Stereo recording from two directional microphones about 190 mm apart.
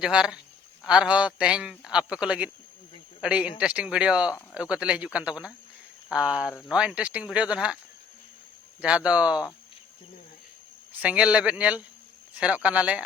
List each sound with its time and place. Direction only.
0.0 s a man's voice: 5° right (ahead or behind)
8.8 s a man's voice: 5° right (ahead or behind)
11.0 s speech: 5° right (ahead or behind)